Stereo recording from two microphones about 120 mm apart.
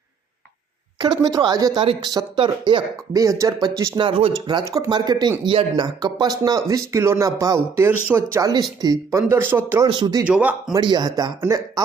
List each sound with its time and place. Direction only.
0.9 s speech: 35° right (ahead or behind)
3.1 s speech: 30° right (ahead or behind)
3.9 s speech: 45° right (ahead or behind)
4.6 s speech: 25° right (ahead or behind)
4.9 s speech: 35° right (ahead or behind)
9.3 s speech: 20° right (ahead or behind)
9.8 s speech: 35° right (ahead or behind)
10.2 s speech: 10° right (ahead or behind)
10.8 s speech: 35° right (ahead or behind)